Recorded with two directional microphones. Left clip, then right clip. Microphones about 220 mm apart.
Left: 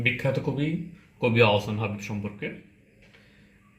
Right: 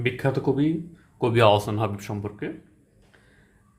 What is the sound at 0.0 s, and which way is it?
Speech, 45° right (ahead or behind).